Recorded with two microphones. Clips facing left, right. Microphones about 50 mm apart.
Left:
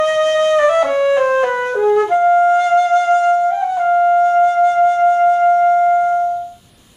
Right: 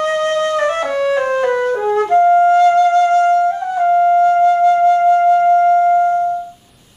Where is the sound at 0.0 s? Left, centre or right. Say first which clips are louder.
Left 2 dB; centre.